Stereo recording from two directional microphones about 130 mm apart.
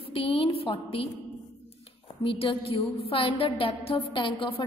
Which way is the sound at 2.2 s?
45° left (ahead or behind).